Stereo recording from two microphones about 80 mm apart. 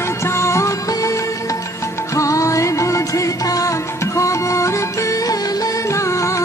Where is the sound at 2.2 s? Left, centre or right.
Left.